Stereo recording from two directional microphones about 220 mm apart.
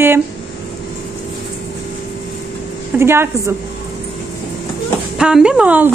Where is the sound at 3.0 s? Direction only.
10° right (ahead or behind).